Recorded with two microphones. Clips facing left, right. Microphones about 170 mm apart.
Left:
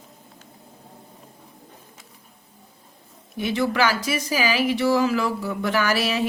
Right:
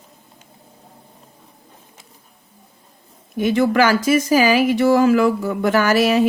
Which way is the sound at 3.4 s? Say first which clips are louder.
Right 6 dB; 50° right (ahead or behind).